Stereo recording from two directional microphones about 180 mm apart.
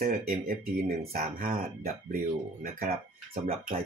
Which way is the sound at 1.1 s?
55° right (ahead or behind).